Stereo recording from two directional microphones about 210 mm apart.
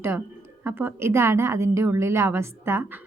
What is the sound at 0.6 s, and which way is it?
A woman's voice, 10° right (ahead or behind).